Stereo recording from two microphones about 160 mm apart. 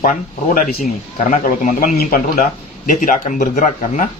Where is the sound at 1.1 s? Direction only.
50° left (ahead or behind).